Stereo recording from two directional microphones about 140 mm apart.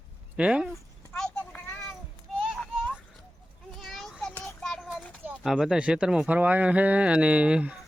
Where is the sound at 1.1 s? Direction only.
5° left (ahead or behind).